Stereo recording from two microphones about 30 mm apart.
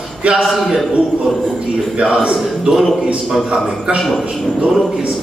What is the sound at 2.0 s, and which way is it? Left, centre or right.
Speech, right.